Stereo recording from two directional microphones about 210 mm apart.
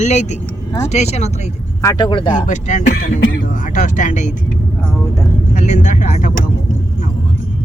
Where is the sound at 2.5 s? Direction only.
35° left (ahead or behind).